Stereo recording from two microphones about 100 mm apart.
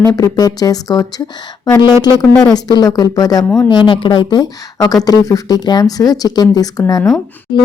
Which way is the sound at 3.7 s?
50° left (ahead or behind).